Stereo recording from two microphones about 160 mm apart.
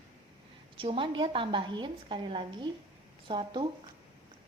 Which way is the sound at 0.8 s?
35° right (ahead or behind).